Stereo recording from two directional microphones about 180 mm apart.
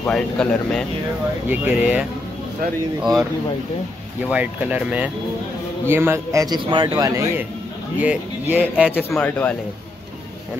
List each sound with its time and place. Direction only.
0.0 s speech: 5° left (ahead or behind)
1.5 s a man's voice: 10° right (ahead or behind)
4.3 s a man's voice: 10° right (ahead or behind)
8.9 s speech: 10° left (ahead or behind)